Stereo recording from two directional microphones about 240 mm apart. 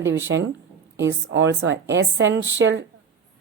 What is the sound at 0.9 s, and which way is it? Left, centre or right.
A woman's voice, right.